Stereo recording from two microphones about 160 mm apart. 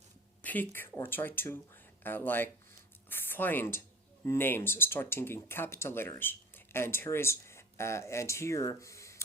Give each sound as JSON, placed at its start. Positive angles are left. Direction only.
{"t": 0.4, "sound": "speech", "side_deg": 10}